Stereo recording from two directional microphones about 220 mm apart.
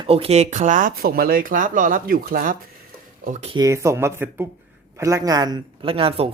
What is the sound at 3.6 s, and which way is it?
Speech, 15° right (ahead or behind).